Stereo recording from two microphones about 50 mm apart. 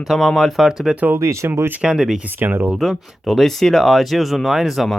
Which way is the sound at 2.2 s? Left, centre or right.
Right.